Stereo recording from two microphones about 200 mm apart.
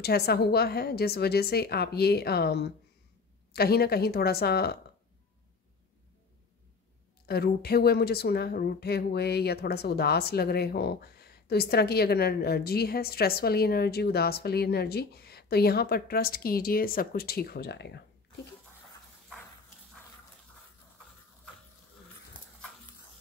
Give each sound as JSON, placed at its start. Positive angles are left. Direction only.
{"t": 0.0, "sound": "speech", "side_deg": 50}
{"t": 7.2, "sound": "speech", "side_deg": 50}